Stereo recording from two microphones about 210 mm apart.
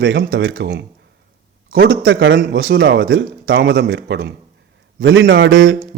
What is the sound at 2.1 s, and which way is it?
A man's voice, 60° right (ahead or behind).